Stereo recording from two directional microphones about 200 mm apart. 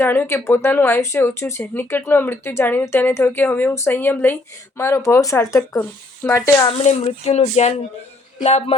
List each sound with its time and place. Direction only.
0.0 s speech: 10° left (ahead or behind)
6.8 s speech: 35° left (ahead or behind)